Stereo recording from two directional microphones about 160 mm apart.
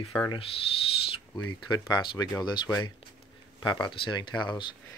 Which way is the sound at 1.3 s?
25° left (ahead or behind).